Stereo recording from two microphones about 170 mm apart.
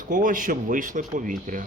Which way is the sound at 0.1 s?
50° right (ahead or behind).